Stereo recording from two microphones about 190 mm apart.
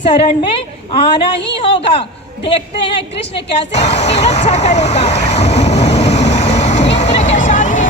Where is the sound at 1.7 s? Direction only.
30° left (ahead or behind).